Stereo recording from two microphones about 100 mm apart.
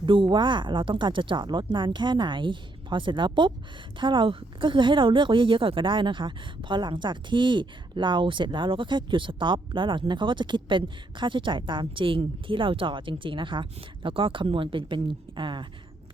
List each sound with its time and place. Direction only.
0.0 s a woman's voice: 55° right (ahead or behind)